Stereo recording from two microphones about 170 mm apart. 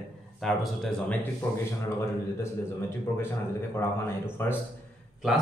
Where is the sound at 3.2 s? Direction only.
15° left (ahead or behind).